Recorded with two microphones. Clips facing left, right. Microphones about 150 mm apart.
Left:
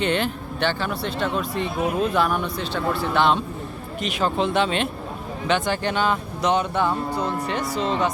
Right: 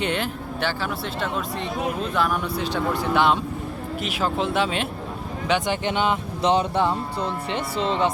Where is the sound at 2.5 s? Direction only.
15° right (ahead or behind).